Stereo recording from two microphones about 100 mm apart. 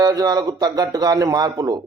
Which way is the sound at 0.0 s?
40° right (ahead or behind).